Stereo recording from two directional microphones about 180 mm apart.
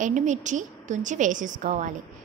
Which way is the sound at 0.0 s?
45° right (ahead or behind).